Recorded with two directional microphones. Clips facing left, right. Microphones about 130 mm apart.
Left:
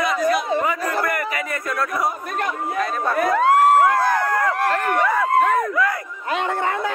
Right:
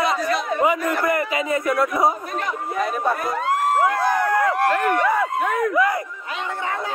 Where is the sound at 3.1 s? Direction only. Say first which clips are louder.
Left 6 dB; 75° left (ahead or behind).